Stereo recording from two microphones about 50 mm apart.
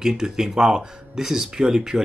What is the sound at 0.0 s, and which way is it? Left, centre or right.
Speech, centre.